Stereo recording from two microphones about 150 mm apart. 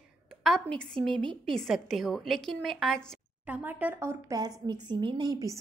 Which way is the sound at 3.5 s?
10° right (ahead or behind).